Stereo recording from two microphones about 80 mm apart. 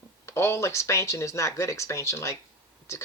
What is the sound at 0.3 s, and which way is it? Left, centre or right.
Speech, left.